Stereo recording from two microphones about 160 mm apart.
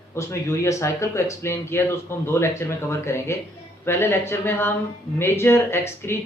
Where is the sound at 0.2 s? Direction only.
15° left (ahead or behind).